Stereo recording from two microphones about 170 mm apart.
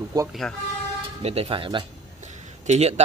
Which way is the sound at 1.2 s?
35° right (ahead or behind).